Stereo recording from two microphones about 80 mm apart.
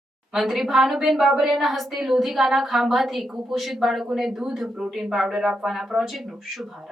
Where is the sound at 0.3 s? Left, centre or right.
Centre.